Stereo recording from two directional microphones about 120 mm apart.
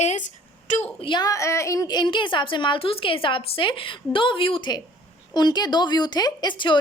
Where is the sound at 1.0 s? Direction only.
35° left (ahead or behind).